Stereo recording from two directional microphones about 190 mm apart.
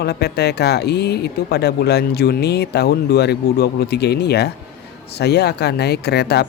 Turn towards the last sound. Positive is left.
turn(degrees=60)  # may be behind; listen again after turning